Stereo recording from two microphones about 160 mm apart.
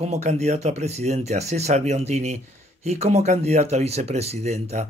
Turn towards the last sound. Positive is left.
turn(degrees=-40)  # may be behind; listen again after turning